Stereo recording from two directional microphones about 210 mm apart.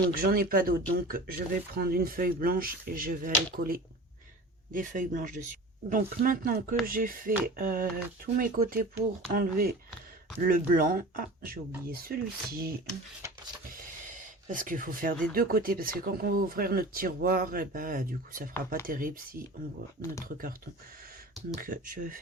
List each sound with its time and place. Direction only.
0.1 s speech: 45° right (ahead or behind)
14.4 s speech: 40° right (ahead or behind)